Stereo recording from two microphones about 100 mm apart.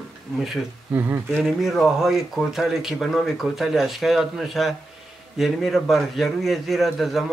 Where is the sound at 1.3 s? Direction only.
Centre (ahead or behind).